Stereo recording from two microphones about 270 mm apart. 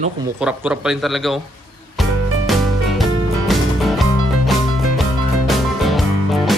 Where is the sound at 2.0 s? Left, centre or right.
Centre.